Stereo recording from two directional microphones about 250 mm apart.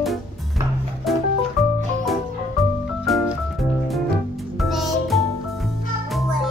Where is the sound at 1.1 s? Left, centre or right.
Centre.